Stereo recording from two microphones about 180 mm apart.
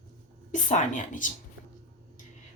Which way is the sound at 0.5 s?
45° left (ahead or behind).